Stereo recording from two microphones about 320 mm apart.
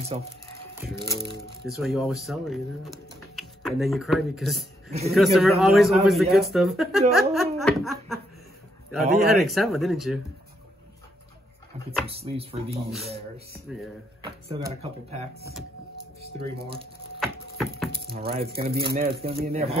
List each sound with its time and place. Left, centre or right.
0.1 s speech: centre
1.4 s speech: centre
11.7 s speech: centre
14.2 s speech: centre
18.1 s speech: right